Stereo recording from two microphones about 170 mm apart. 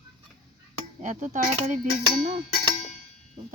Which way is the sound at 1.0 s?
45° right (ahead or behind).